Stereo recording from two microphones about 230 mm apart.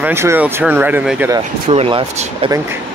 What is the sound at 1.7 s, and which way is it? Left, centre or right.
Speech, right.